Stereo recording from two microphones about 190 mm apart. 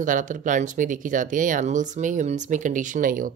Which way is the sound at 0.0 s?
45° right (ahead or behind).